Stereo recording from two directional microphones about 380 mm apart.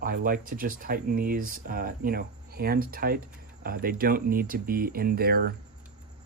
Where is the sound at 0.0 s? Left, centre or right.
Right.